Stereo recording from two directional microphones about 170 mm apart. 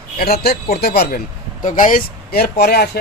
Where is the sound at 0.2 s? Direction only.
65° left (ahead or behind).